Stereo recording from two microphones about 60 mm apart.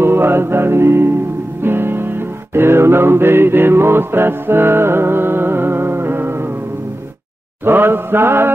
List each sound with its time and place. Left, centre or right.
0.0 s music: right
7.6 s mantra: right